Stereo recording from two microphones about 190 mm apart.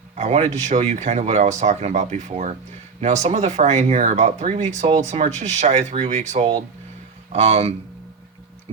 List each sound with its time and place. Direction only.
0.2 s speech: 35° right (ahead or behind)